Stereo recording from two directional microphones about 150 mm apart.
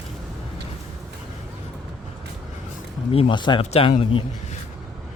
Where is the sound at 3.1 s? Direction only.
30° left (ahead or behind).